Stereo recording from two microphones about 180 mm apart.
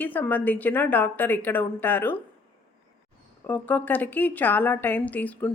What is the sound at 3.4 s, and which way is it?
Speech, 10° left (ahead or behind).